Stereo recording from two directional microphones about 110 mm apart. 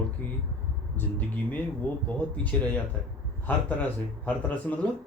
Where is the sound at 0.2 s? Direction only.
15° left (ahead or behind).